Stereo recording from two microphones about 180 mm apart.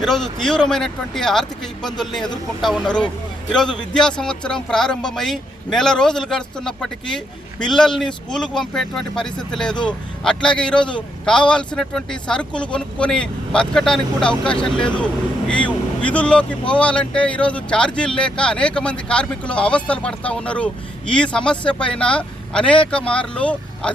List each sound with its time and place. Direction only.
0.0 s speech: 5° left (ahead or behind)